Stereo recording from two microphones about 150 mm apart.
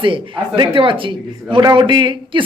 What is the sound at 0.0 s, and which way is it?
Speech, 35° right (ahead or behind).